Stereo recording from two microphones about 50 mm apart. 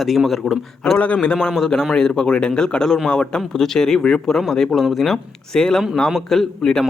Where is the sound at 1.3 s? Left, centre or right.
Centre.